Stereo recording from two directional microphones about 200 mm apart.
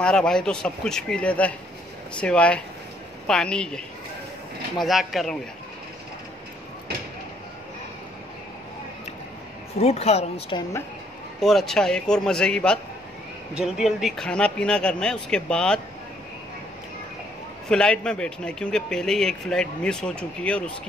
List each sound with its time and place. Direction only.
0.0 s a man's voice: 5° left (ahead or behind)
9.8 s speech: 30° left (ahead or behind)
11.3 s a man's voice: centre (ahead or behind)
17.6 s a man's voice: 5° left (ahead or behind)